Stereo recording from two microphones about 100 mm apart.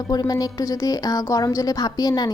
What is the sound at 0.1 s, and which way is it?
A woman's voice, 40° left (ahead or behind).